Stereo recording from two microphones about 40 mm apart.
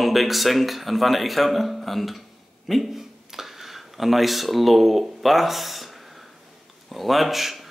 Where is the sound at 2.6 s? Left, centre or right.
Centre.